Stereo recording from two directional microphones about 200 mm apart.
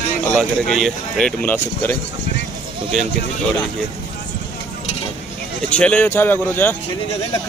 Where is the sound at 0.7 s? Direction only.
5° left (ahead or behind).